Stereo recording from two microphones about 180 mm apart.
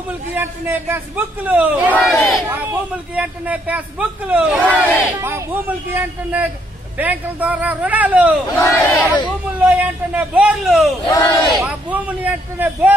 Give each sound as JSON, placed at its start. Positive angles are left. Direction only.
{"t": 0.3, "sound": "a man's voice", "side_deg": -10}
{"t": 4.6, "sound": "speech", "side_deg": 10}
{"t": 5.2, "sound": "a man's voice", "side_deg": -10}
{"t": 8.5, "sound": "speech", "side_deg": 15}
{"t": 9.7, "sound": "a man's voice", "side_deg": -10}
{"t": 11.1, "sound": "speech", "side_deg": 20}
{"t": 11.5, "sound": "a man's voice", "side_deg": -5}